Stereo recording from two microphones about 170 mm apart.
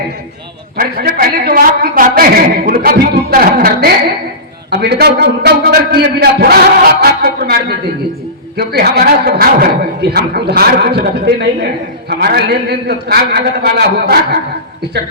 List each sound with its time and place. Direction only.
0.8 s a woman's voice: 60° right (ahead or behind)